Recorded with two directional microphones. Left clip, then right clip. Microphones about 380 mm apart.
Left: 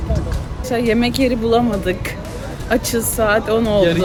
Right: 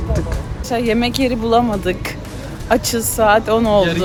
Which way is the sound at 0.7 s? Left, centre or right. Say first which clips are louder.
Even; centre.